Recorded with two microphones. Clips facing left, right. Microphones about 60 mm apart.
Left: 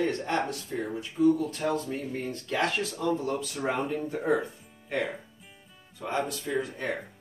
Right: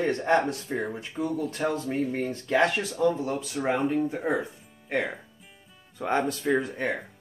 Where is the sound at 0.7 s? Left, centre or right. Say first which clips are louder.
Right 4 dB; right.